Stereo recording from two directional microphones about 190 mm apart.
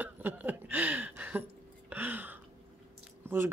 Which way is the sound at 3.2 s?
10° right (ahead or behind).